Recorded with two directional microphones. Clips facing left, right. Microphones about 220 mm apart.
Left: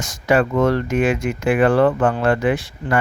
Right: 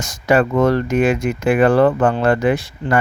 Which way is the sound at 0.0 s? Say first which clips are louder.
Right 2 dB; 40° right (ahead or behind).